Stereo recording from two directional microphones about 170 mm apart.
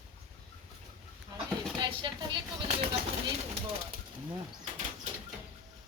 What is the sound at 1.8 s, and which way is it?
Speech, 25° right (ahead or behind).